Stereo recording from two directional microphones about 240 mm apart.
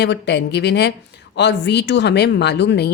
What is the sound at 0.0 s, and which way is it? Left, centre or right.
Speech, left.